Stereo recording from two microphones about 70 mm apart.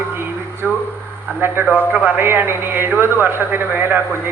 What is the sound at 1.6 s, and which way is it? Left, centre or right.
Speech, right.